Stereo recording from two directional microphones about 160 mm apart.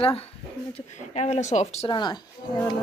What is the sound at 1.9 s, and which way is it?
Speech, 30° left (ahead or behind).